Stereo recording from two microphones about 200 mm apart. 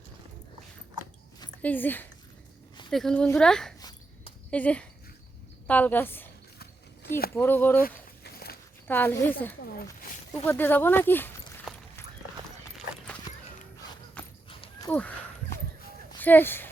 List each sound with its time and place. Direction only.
1.6 s a woman's voice: 10° left (ahead or behind)
3.8 s a sound: 20° left (ahead or behind)
4.5 s a woman's voice: 5° left (ahead or behind)
7.3 s a woman's voice: 10° left (ahead or behind)
7.8 s a sound: 50° left (ahead or behind)
8.9 s a woman's voice: 10° left (ahead or behind)
10.3 s speech: 10° left (ahead or behind)
14.8 s speech: 5° left (ahead or behind)
16.1 s speech: 10° left (ahead or behind)